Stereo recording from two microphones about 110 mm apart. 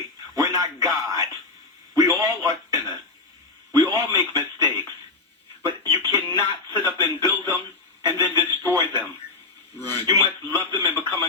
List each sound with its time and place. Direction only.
0.3 s a sound: 35° right (ahead or behind)
8.6 s a man's voice: 25° left (ahead or behind)
9.9 s a man's voice: 35° right (ahead or behind)